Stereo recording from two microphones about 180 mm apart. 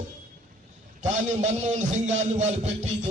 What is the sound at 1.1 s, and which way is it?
A man's voice, 40° right (ahead or behind).